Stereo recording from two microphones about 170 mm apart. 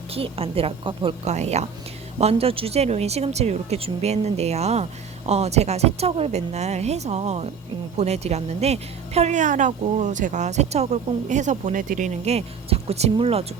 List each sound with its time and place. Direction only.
0.1 s a woman's voice: 35° right (ahead or behind)